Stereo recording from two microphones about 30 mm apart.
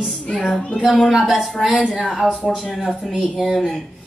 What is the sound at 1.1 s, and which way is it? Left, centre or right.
Speech, centre.